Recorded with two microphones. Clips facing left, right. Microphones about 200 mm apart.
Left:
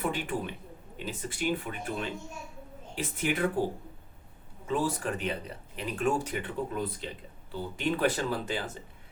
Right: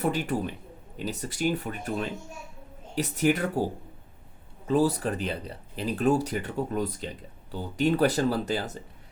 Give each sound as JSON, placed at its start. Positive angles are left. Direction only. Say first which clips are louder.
{"t": 0.0, "sound": "speech", "louder": "right 4 dB", "side_deg": -40}
{"t": 4.6, "sound": "speech", "louder": "right 6 dB", "side_deg": -35}